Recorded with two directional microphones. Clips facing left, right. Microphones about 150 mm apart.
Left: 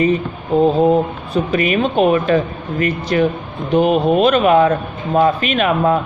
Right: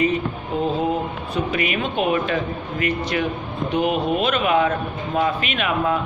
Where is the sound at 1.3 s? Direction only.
40° left (ahead or behind).